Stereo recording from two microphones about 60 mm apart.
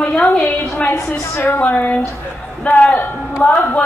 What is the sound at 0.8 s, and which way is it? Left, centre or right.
Speech, left.